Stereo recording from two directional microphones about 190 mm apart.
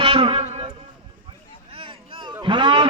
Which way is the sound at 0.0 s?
25° right (ahead or behind).